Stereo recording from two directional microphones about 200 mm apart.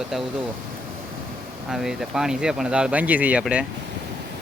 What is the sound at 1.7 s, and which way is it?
Speech, centre (ahead or behind).